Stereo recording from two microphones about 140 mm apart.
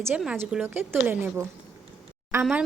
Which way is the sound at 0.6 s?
15° right (ahead or behind).